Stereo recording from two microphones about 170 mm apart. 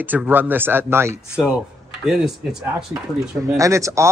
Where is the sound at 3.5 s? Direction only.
20° right (ahead or behind).